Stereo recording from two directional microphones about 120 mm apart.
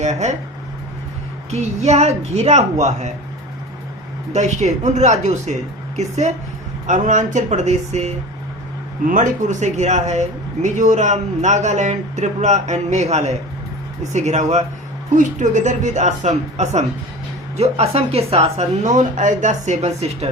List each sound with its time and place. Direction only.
0.0 s speech: 75° right (ahead or behind)
1.5 s a woman's voice: 70° right (ahead or behind)
4.3 s a woman's voice: 75° right (ahead or behind)
6.8 s speech: 90° right; by 8.1 s 70° right (ahead or behind)
9.1 s speech: 90° right
15.1 s speech: 90° right
17.6 s a woman's voice: 60° right (ahead or behind)